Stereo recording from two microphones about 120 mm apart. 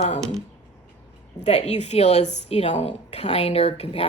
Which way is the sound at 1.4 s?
65° left (ahead or behind).